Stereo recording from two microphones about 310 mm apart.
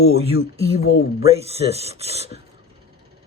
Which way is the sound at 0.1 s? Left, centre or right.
Centre.